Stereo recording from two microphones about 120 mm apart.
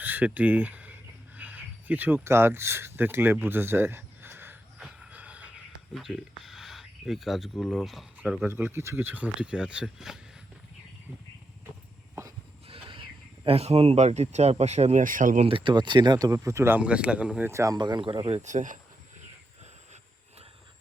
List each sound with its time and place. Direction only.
0.0 s a sound: 15° right (ahead or behind)
5.9 s speech: centre (ahead or behind)
8.4 s speech: 20° right (ahead or behind)
12.6 s speech: 50° right (ahead or behind); by 15.4 s 90° right
15.4 s speech: 45° right (ahead or behind); by 16.8 s 20° right (ahead or behind)
16.8 s speech: 10° right (ahead or behind)
17.5 s speech: 25° right (ahead or behind)
17.7 s speech: 40° right (ahead or behind)
18.4 s speech: 90° right